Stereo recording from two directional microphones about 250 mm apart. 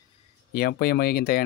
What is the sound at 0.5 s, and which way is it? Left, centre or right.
Speech, left.